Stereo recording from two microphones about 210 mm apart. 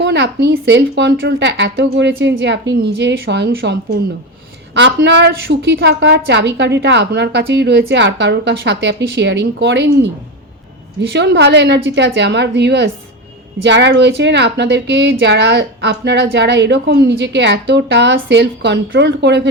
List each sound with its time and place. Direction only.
0.0 s a woman's voice: 55° right (ahead or behind)
11.1 s a woman's voice: 55° right (ahead or behind)